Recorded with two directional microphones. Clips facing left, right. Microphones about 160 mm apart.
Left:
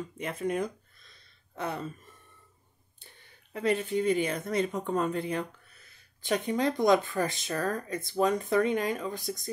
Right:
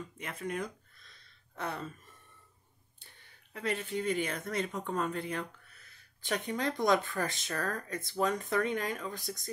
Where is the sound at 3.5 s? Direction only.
20° left (ahead or behind).